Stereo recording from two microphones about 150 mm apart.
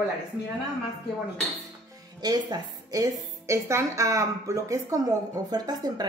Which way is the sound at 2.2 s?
25° right (ahead or behind).